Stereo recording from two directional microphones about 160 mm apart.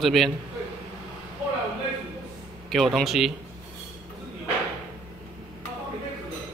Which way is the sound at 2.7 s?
Centre (ahead or behind).